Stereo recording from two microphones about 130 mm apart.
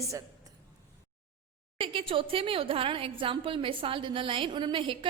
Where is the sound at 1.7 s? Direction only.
45° right (ahead or behind).